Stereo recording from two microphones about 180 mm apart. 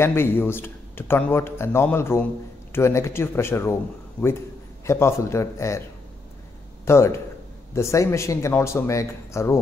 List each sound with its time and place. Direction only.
0.0 s speech: 15° left (ahead or behind)
4.8 s speech: 15° left (ahead or behind)
6.9 s speech: 15° left (ahead or behind)